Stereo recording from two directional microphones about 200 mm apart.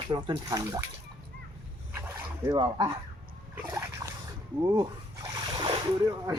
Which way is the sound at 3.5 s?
15° right (ahead or behind).